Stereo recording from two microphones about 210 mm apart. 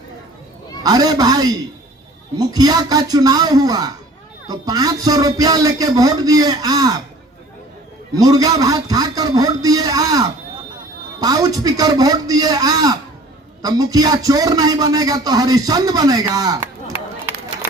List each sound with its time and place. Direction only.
0.8 s a man's voice: 20° right (ahead or behind)
8.1 s a man's voice: 15° right (ahead or behind)
16.9 s run: 10° right (ahead or behind)